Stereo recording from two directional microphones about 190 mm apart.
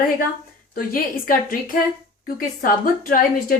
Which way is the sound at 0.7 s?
50° left (ahead or behind).